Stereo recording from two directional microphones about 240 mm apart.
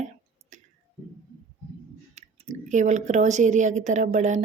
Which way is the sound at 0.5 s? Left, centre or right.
Right.